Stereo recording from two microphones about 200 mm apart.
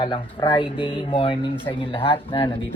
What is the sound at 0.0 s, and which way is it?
Speech, 25° left (ahead or behind).